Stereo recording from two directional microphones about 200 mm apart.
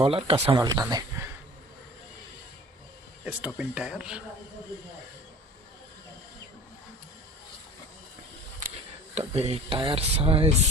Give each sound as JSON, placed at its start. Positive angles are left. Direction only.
{"t": 0.0, "sound": "speech", "side_deg": -30}
{"t": 3.2, "sound": "speech", "side_deg": -5}
{"t": 9.1, "sound": "speech", "side_deg": -30}